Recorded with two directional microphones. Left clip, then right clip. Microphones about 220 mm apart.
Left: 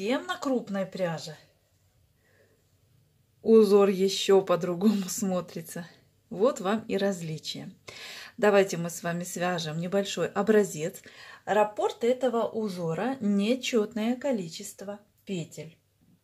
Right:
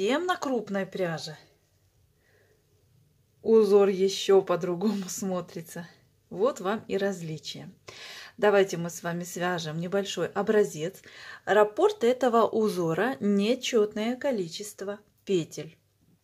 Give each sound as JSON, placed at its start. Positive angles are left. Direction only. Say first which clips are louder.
{"t": 0.0, "sound": "speech", "louder": "right 3 dB", "side_deg": -20}
{"t": 3.4, "sound": "a woman's voice", "louder": "even", "side_deg": 0}
{"t": 11.1, "sound": "speech", "louder": "right 3 dB", "side_deg": -15}
{"t": 15.2, "sound": "speech", "louder": "right 9 dB", "side_deg": -30}